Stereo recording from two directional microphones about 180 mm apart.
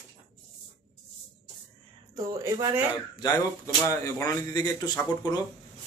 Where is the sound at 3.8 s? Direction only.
15° left (ahead or behind).